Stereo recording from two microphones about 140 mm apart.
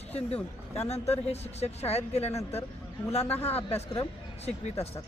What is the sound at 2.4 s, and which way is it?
Speech, 15° left (ahead or behind).